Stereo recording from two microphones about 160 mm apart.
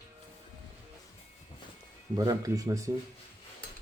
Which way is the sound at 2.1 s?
25° right (ahead or behind).